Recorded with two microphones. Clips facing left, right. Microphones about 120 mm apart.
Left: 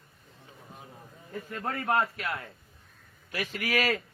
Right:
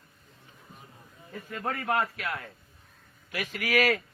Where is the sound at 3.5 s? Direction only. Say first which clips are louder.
Right 3 dB; 30° left (ahead or behind).